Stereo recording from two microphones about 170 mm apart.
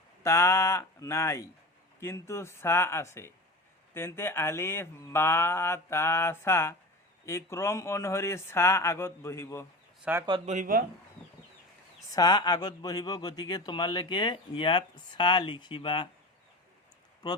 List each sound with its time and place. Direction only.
0.2 s speech: 15° left (ahead or behind)
10.0 s speech: 10° right (ahead or behind)
10.4 s speech: 45° right (ahead or behind)
12.1 s speech: 25° left (ahead or behind)